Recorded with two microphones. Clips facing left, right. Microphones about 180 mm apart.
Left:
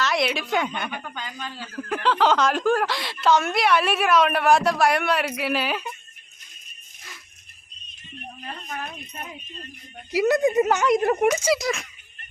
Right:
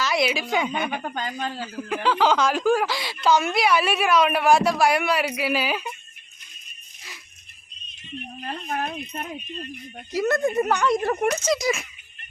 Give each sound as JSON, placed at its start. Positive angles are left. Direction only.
{"t": 0.0, "sound": "a woman's voice", "side_deg": 0}
{"t": 0.9, "sound": "speech", "side_deg": -45}
{"t": 1.7, "sound": "speech", "side_deg": -5}
{"t": 8.7, "sound": "speech", "side_deg": -50}
{"t": 10.1, "sound": "a woman's voice", "side_deg": 10}
{"t": 11.3, "sound": "speech", "side_deg": 5}